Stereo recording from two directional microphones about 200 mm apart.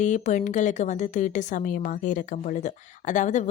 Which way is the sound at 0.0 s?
35° left (ahead or behind).